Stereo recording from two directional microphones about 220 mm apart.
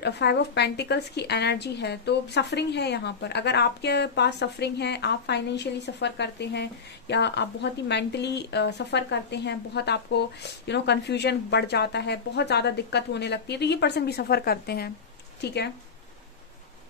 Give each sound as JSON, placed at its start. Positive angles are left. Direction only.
{"t": 0.0, "sound": "a woman's voice", "side_deg": 50}